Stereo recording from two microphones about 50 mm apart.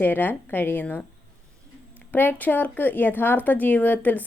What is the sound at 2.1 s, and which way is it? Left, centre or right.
A woman's voice, left.